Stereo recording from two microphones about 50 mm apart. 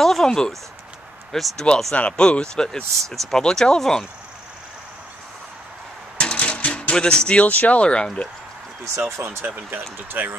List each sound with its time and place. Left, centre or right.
0.0 s a sound: centre
1.3 s speech: centre
2.0 s speech: left
6.1 s a sound: left
7.4 s speech: left
9.1 s speech: right
9.7 s speech: right